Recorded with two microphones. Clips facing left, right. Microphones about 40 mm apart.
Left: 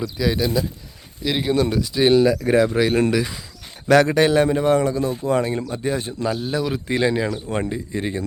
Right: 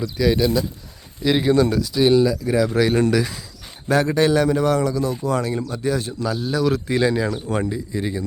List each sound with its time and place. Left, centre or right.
0.0 s speech: centre
2.0 s a man's voice: left
2.7 s speech: centre
3.8 s speech: left
4.2 s a man's voice: left